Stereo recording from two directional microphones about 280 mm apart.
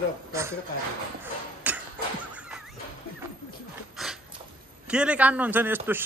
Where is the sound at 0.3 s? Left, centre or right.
Centre.